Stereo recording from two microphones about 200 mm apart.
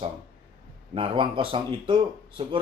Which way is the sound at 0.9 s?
25° right (ahead or behind).